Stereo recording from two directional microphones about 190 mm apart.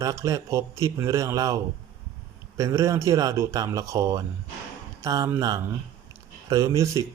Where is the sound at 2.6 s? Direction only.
15° right (ahead or behind).